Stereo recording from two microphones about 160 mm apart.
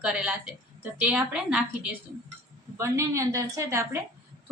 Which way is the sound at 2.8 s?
20° right (ahead or behind).